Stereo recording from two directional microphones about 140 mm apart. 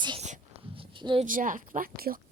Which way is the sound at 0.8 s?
35° right (ahead or behind).